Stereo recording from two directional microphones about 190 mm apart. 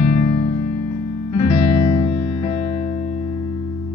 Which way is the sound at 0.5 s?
30° left (ahead or behind).